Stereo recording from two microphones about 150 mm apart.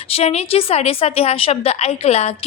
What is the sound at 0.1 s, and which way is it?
A woman's voice, 40° left (ahead or behind).